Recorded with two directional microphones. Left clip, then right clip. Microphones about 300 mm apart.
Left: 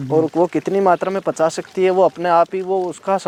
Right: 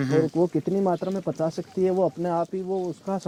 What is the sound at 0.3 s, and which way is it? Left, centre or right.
Speech, centre.